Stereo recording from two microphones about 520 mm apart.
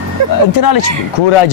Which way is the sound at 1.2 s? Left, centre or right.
Left.